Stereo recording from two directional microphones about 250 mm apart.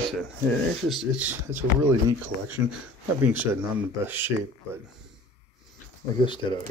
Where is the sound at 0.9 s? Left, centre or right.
Centre.